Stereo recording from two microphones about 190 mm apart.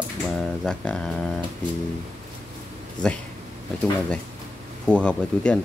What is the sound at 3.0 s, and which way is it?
Speech, 5° left (ahead or behind).